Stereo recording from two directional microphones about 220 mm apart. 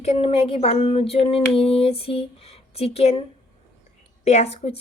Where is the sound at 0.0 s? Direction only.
25° left (ahead or behind).